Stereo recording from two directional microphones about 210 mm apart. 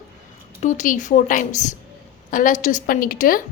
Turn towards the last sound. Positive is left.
turn(degrees=40)  # may be behind; listen again after turning